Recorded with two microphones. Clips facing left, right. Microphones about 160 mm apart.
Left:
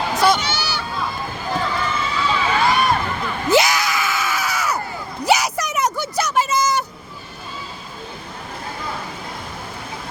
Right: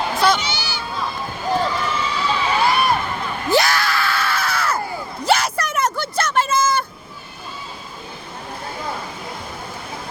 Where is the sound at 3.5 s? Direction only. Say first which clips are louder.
Left 1 dB; 20° left (ahead or behind).